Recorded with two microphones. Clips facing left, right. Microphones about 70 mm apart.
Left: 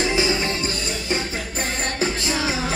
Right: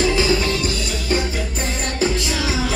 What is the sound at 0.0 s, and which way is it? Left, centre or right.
Music, left.